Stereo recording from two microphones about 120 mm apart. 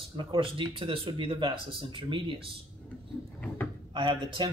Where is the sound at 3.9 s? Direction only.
45° right (ahead or behind).